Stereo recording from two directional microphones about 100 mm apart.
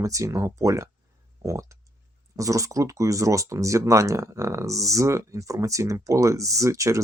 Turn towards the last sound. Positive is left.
turn(degrees=-30)  # may be behind; listen again after turning